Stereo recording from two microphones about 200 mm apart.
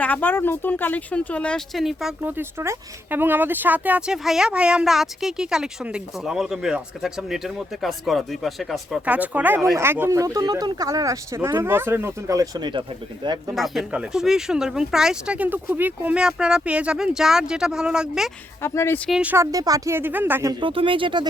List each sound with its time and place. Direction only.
0.0 s speech: 10° left (ahead or behind); by 13.4 s 25° right (ahead or behind)
13.6 s speech: 5° right (ahead or behind)
18.6 s speech: 15° left (ahead or behind)
19.2 s speech: 10° right (ahead or behind)